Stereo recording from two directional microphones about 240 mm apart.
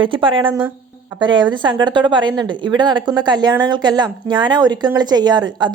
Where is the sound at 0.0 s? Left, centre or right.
Right.